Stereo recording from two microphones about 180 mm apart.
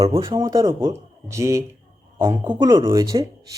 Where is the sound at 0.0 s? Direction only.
20° right (ahead or behind).